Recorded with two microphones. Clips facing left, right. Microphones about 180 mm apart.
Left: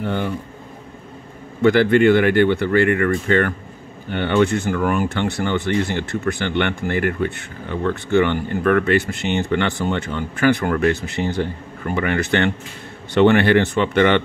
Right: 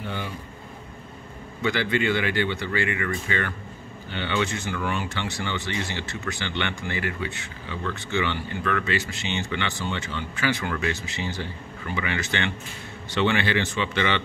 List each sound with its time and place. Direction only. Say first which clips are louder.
0.0 s speech: left 10 dB; 55° left (ahead or behind)
1.6 s speech: left 11 dB; 55° left (ahead or behind)